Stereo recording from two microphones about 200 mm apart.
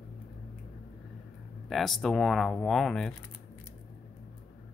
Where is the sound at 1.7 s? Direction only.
Centre (ahead or behind).